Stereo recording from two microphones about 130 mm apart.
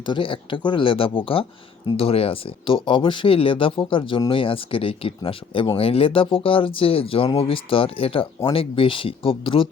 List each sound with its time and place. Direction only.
0.0 s speech: 40° left (ahead or behind)